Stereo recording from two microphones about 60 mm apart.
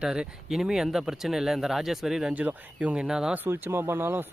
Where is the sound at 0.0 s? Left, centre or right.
Centre.